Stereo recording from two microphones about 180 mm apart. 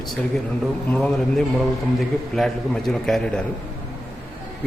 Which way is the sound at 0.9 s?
5° left (ahead or behind).